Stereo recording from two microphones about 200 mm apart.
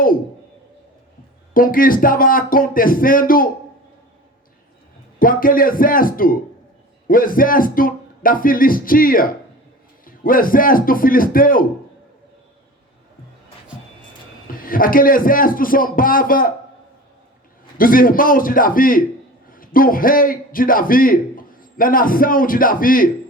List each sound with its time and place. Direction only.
1.5 s speech: 45° left (ahead or behind)
5.2 s speech: 45° left (ahead or behind)
14.4 s speech: 45° left (ahead or behind)
17.7 s a man's voice: 45° left (ahead or behind)